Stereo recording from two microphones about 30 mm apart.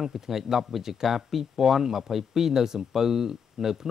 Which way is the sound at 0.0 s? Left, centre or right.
Centre.